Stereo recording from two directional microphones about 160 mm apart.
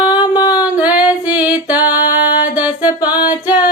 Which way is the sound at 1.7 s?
25° left (ahead or behind).